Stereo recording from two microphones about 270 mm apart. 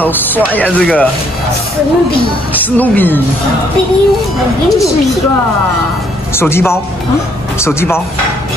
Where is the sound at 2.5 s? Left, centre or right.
Centre.